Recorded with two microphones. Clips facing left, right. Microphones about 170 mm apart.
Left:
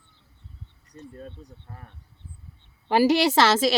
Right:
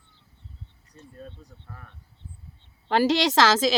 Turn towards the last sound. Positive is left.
turn(degrees=5)  # may be behind; listen again after turning